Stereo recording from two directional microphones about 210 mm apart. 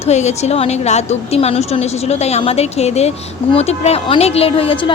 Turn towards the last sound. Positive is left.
turn(degrees=25)  # may be behind; listen again after turning